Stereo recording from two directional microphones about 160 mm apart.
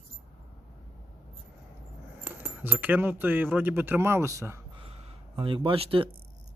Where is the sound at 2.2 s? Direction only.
10° right (ahead or behind).